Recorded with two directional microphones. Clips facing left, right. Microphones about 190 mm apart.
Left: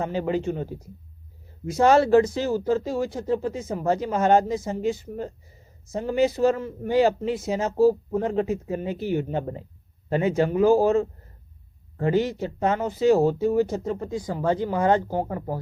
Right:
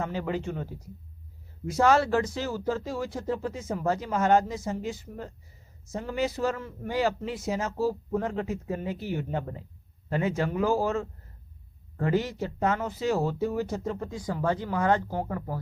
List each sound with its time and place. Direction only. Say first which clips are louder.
0.0 s speech: left 5 dB; 25° left (ahead or behind)